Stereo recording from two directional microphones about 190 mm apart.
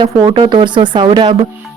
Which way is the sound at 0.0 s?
30° right (ahead or behind).